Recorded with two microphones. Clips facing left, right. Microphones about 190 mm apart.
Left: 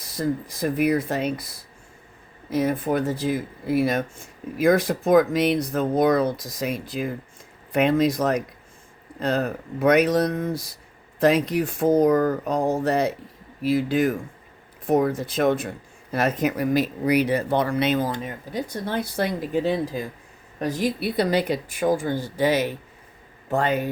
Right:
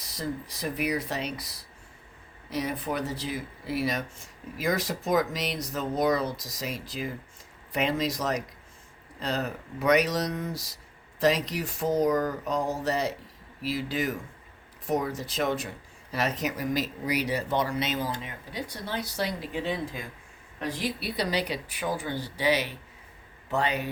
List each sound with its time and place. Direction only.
0.0 s speech: 50° left (ahead or behind)